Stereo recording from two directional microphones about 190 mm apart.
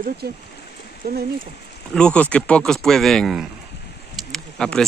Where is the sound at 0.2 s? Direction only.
55° right (ahead or behind).